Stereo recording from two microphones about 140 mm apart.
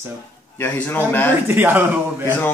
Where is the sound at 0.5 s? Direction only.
15° left (ahead or behind).